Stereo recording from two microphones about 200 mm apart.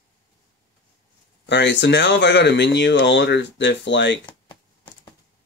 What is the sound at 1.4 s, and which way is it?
Speech, 65° left (ahead or behind).